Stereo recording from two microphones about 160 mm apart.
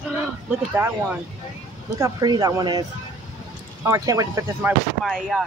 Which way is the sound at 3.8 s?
20° right (ahead or behind).